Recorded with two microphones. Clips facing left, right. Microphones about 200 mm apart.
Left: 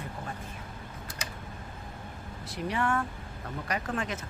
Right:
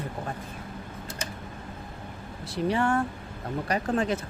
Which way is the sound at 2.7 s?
30° right (ahead or behind).